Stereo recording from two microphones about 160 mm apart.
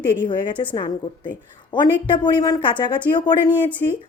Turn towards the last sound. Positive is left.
turn(degrees=10)  # may be behind; listen again after turning